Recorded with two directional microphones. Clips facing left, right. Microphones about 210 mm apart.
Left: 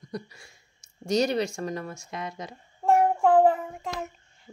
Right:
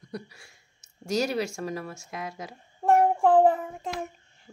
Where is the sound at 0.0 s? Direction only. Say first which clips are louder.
Left 2 dB; 5° right (ahead or behind).